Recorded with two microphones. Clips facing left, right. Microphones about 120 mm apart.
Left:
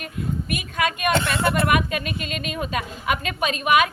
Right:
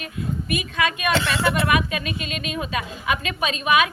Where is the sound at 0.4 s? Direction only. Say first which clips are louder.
Right 2 dB; 50° left (ahead or behind).